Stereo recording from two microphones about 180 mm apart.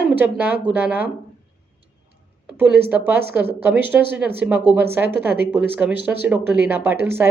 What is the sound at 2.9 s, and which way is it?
A woman's voice, 10° right (ahead or behind).